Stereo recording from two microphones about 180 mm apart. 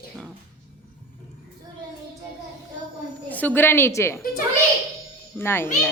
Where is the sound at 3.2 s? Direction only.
10° left (ahead or behind).